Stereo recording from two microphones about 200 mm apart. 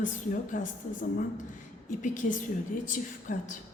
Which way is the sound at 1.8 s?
40° left (ahead or behind).